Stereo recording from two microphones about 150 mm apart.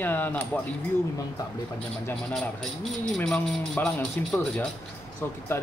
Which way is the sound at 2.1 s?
5° left (ahead or behind).